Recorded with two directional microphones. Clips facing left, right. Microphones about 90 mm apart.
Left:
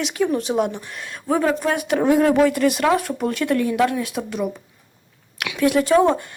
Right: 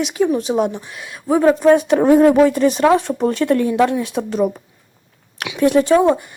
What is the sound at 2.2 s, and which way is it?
Speech, 20° right (ahead or behind).